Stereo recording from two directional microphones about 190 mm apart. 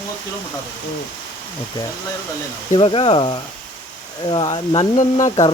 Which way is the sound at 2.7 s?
30° left (ahead or behind).